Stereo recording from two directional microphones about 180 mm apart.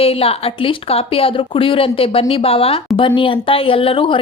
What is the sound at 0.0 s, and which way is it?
Speech, 30° left (ahead or behind).